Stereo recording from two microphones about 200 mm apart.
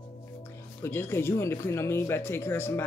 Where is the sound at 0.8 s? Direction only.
10° left (ahead or behind).